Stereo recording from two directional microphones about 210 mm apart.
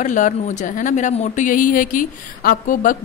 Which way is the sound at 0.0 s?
35° left (ahead or behind).